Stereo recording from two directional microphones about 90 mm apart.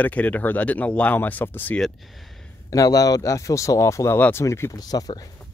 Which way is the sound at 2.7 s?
40° left (ahead or behind).